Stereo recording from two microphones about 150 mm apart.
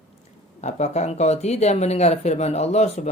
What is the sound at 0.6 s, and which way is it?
Speech, 50° left (ahead or behind).